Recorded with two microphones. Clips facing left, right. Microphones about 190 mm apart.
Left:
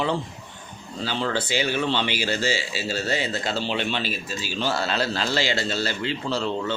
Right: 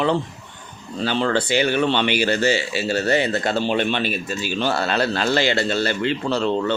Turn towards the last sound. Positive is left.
turn(degrees=-60)  # may be behind; listen again after turning